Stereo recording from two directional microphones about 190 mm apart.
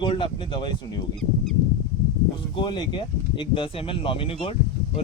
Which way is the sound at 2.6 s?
25° left (ahead or behind).